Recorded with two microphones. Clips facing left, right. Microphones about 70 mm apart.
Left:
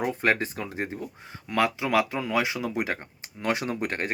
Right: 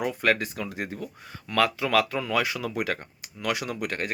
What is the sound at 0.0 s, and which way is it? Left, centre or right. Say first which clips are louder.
Speech: even; left.